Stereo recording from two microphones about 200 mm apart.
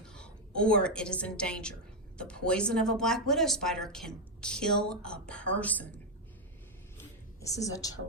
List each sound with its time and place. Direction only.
0.0 s a woman's voice: 5° left (ahead or behind)
7.4 s a woman's voice: 15° left (ahead or behind)